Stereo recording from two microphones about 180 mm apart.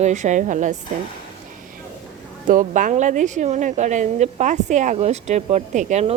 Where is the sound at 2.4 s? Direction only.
45° right (ahead or behind).